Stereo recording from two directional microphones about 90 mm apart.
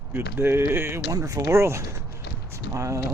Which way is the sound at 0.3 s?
25° right (ahead or behind).